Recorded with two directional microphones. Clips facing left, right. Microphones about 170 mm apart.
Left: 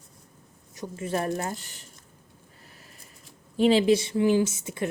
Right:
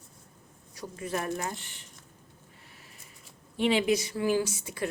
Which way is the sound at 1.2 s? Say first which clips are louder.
Left 4 dB; 40° left (ahead or behind).